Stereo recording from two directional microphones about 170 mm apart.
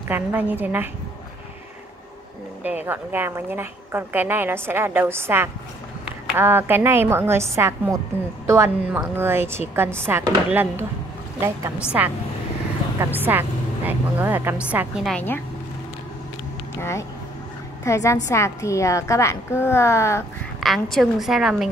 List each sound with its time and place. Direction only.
0.1 s a woman's voice: 10° right (ahead or behind)
2.6 s a woman's voice: 10° right (ahead or behind)
15.1 s a woman's voice: 10° left (ahead or behind)
16.7 s a sound: 15° left (ahead or behind)
17.8 s a woman's voice: 20° left (ahead or behind)
20.6 s a woman's voice: centre (ahead or behind)